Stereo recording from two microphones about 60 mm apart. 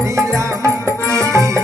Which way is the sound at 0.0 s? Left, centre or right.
Right.